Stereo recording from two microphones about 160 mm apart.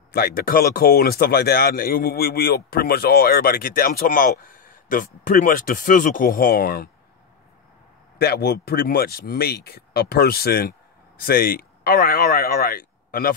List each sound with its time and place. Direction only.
0.1 s speech: 70° left (ahead or behind)
8.2 s speech: 80° left